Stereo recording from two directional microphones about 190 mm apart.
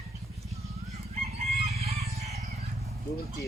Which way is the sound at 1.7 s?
35° right (ahead or behind).